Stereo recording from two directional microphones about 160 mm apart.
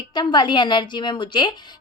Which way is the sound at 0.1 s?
25° left (ahead or behind).